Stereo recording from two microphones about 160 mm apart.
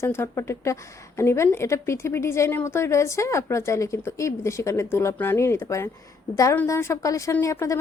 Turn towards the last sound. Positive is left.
turn(degrees=20)  # may be behind; listen again after turning